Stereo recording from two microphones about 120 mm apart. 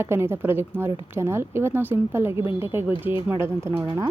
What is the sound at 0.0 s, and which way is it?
Speech, 20° right (ahead or behind).